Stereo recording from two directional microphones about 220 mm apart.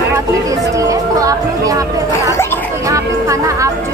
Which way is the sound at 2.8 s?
15° right (ahead or behind).